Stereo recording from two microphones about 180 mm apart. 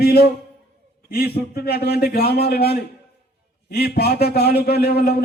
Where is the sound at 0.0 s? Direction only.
60° left (ahead or behind).